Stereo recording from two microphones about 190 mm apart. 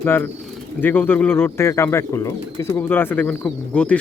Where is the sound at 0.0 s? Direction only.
10° left (ahead or behind).